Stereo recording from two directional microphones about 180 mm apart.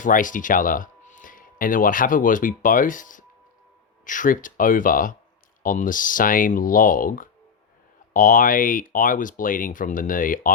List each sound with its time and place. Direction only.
0.0 s speech: 45° left (ahead or behind)